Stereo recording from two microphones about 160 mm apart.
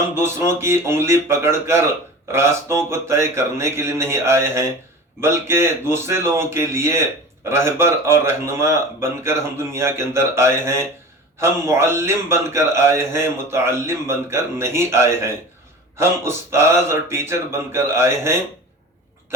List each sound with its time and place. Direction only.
0.1 s speech: 15° right (ahead or behind)